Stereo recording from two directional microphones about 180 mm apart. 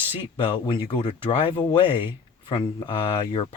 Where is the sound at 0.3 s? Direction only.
30° left (ahead or behind).